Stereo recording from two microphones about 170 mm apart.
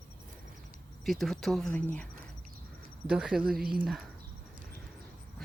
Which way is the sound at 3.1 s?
5° right (ahead or behind).